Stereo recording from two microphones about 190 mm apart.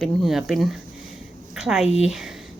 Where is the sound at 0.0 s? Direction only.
Centre (ahead or behind).